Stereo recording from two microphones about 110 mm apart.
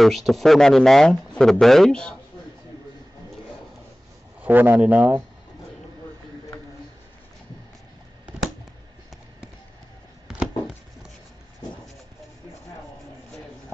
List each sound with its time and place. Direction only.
0.0 s speech: centre (ahead or behind)
4.4 s speech: 15° right (ahead or behind)
10.2 s a sound: 5° right (ahead or behind)